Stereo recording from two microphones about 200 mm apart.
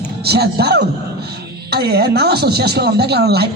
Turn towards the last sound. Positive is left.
turn(degrees=-55)  # may be behind; listen again after turning